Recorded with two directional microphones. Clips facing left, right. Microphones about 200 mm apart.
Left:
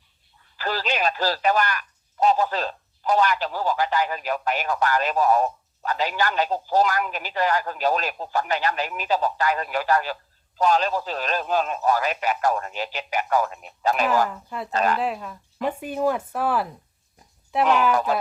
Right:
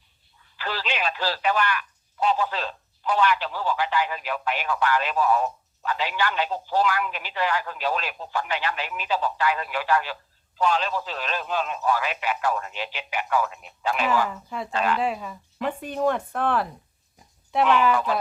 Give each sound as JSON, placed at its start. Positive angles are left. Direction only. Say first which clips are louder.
{"t": 0.5, "sound": "speech", "louder": "left 4 dB", "side_deg": 40}
{"t": 14.3, "sound": "speech", "louder": "even", "side_deg": 0}
{"t": 14.7, "sound": "speech", "louder": "left 2 dB", "side_deg": 40}
{"t": 14.9, "sound": "speech", "louder": "even", "side_deg": 0}
{"t": 17.2, "sound": "oink", "louder": "even", "side_deg": 0}
{"t": 17.9, "sound": "speech", "louder": "left 2 dB", "side_deg": 45}